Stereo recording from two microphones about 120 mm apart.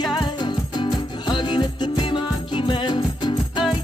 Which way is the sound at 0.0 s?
35° left (ahead or behind).